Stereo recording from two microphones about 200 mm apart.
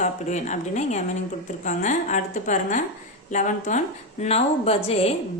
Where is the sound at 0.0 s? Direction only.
35° left (ahead or behind).